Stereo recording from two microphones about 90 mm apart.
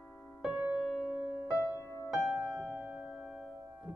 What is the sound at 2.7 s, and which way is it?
Music, 15° right (ahead or behind).